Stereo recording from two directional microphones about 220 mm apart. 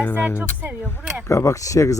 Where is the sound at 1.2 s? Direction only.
15° left (ahead or behind).